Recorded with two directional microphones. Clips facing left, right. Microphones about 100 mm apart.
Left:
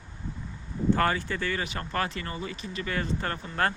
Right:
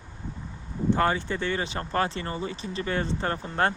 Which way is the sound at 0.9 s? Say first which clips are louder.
Right 1 dB; 20° right (ahead or behind).